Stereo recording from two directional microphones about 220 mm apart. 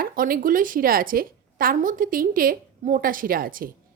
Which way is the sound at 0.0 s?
40° right (ahead or behind).